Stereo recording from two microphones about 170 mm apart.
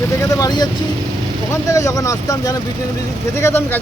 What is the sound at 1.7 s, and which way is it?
Speech, 20° left (ahead or behind).